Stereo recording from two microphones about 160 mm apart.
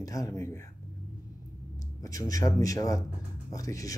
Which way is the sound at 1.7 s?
20° left (ahead or behind).